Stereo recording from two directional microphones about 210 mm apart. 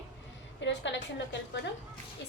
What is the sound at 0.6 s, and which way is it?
Speech, 60° left (ahead or behind).